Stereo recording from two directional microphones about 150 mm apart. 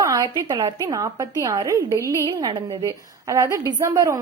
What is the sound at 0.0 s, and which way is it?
A woman's voice, 25° right (ahead or behind).